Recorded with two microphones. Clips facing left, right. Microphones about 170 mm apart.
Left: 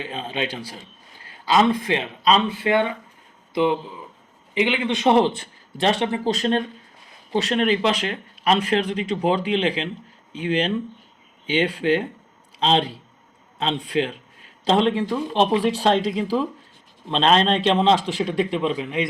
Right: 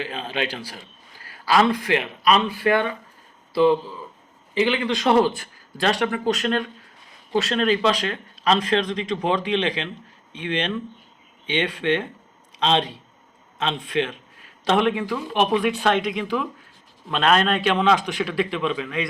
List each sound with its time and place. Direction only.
0.0 s a man's voice: 25° left (ahead or behind)